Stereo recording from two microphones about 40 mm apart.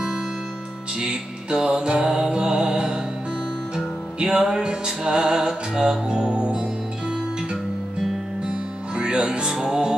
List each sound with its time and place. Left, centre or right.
1.0 s music: right
8.5 s music: right